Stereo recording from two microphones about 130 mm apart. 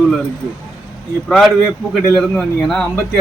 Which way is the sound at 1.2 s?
5° left (ahead or behind).